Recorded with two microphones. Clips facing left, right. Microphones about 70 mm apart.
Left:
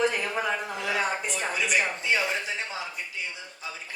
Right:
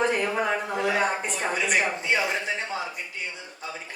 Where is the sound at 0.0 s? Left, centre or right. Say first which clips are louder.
Right 2 dB; right.